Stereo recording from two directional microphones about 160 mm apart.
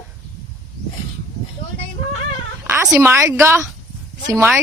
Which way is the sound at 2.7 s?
15° right (ahead or behind).